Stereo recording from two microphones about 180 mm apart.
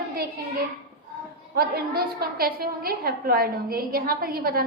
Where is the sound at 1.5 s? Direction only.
55° right (ahead or behind).